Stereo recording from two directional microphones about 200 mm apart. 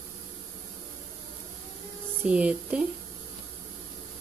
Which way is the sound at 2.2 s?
5° right (ahead or behind).